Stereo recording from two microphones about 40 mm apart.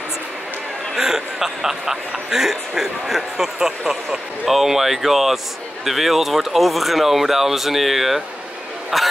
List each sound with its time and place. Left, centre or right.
0.9 s a man's voice: centre
4.5 s a man's voice: centre